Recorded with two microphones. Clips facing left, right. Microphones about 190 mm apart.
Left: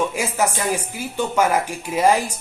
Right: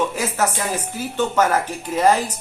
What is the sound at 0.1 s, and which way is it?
Speech, 10° left (ahead or behind).